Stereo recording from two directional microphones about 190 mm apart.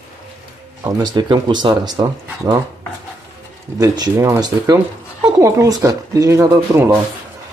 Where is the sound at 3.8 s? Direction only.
15° right (ahead or behind).